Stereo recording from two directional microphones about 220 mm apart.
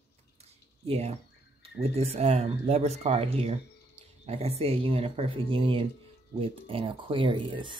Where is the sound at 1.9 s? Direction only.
30° right (ahead or behind).